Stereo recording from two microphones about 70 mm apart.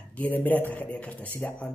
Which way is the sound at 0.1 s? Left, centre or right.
Left.